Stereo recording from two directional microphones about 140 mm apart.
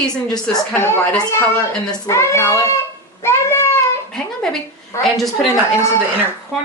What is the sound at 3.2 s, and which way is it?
Cat, 20° left (ahead or behind).